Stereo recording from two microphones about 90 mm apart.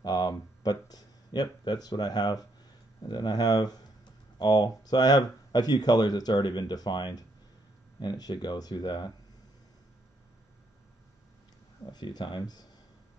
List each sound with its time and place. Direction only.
0.0 s speech: 50° left (ahead or behind)
11.8 s speech: 50° left (ahead or behind)